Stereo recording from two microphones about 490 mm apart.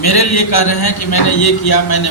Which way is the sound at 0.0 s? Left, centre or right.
Left.